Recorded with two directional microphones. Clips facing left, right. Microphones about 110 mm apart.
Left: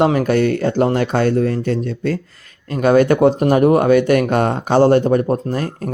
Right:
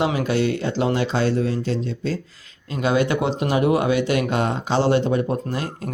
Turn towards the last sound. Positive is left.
turn(degrees=45)  # may be behind; listen again after turning